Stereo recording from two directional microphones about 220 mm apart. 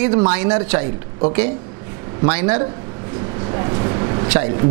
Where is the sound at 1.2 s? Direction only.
25° right (ahead or behind).